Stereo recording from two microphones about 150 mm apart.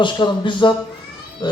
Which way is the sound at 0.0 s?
30° left (ahead or behind).